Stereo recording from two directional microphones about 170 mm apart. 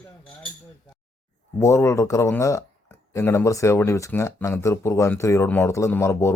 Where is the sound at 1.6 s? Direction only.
15° left (ahead or behind).